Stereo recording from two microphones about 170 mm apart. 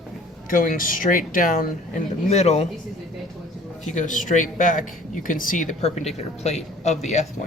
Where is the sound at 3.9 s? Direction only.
45° left (ahead or behind).